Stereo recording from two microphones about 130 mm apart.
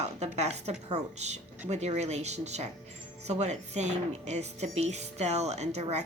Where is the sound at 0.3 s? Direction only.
60° right (ahead or behind).